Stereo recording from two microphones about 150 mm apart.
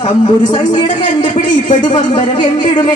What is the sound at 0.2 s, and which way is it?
Speech, 30° left (ahead or behind).